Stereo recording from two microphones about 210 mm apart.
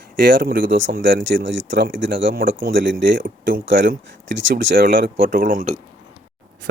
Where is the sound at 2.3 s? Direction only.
45° right (ahead or behind).